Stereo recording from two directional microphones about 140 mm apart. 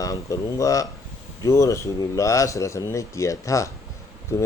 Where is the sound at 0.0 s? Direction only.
25° left (ahead or behind).